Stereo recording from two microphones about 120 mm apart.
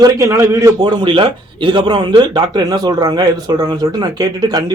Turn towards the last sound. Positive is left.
turn(degrees=-35)  # may be behind; listen again after turning